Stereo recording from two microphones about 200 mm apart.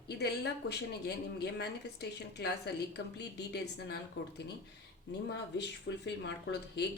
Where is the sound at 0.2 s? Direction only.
55° left (ahead or behind).